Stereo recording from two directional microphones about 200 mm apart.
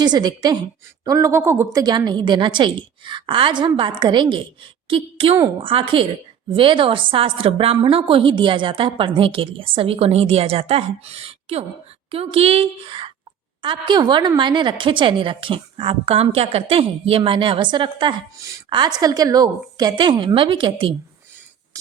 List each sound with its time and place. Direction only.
0.0 s a woman's voice: 20° right (ahead or behind)